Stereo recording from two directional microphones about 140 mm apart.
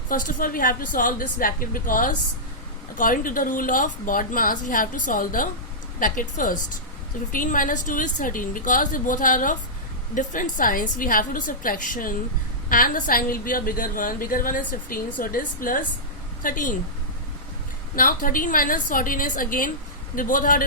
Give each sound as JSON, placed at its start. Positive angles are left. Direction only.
{"t": 0.1, "sound": "a woman's voice", "side_deg": 80}
{"t": 17.9, "sound": "a woman's voice", "side_deg": 80}